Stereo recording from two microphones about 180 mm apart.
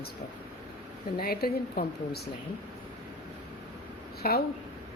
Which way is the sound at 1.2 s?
55° left (ahead or behind).